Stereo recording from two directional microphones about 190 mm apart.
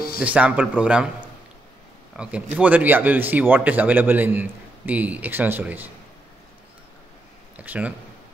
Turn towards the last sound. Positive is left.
turn(degrees=-5)  # may be behind; listen again after turning